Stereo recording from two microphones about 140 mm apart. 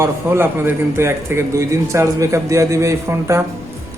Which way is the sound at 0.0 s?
15° right (ahead or behind).